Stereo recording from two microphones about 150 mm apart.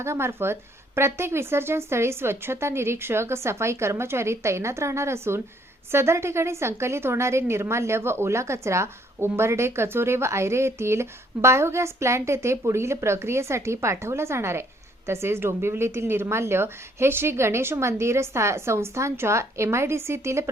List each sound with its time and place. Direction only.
0.0 s a woman's voice: 15° right (ahead or behind)